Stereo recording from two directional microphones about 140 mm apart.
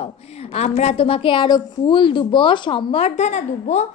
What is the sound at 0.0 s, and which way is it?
A woman's voice, 50° left (ahead or behind).